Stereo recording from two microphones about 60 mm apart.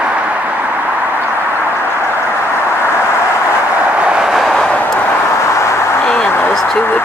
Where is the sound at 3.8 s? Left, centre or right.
Right.